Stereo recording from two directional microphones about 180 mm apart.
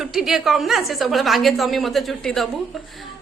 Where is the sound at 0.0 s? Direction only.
Centre (ahead or behind).